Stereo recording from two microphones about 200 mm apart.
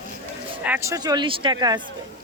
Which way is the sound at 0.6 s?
10° right (ahead or behind).